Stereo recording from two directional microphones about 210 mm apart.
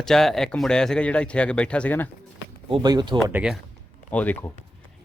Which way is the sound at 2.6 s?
20° right (ahead or behind).